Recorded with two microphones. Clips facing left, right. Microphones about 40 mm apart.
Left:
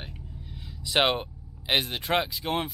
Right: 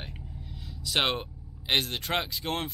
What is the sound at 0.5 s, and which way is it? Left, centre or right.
Speech, centre.